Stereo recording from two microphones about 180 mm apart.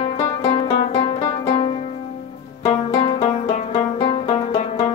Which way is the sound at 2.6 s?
30° left (ahead or behind).